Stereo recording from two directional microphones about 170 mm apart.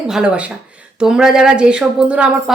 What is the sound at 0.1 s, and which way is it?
A woman's voice, 5° right (ahead or behind).